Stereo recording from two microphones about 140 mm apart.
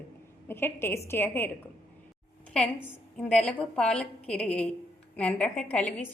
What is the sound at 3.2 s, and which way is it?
A woman's voice, 10° left (ahead or behind).